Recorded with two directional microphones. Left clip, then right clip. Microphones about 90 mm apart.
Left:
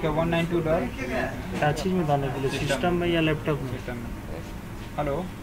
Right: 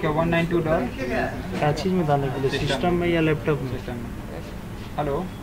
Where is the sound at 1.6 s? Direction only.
15° left (ahead or behind).